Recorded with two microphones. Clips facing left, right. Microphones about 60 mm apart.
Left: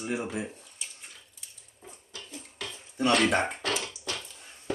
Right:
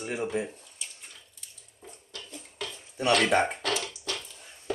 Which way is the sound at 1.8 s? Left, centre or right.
Centre.